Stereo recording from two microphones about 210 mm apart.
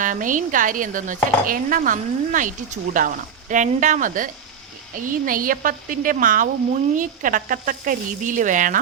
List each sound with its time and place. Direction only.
0.0 s speech: 40° right (ahead or behind)